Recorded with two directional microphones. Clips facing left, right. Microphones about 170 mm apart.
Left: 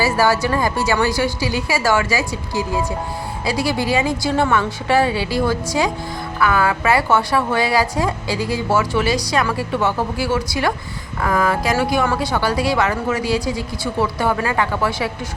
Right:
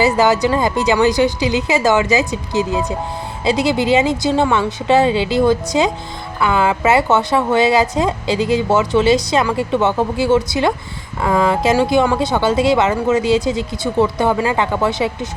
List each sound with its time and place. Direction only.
0.0 s a woman's voice: 20° right (ahead or behind)